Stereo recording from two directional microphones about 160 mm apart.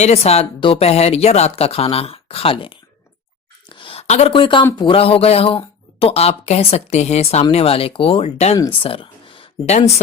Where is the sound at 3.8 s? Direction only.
35° left (ahead or behind).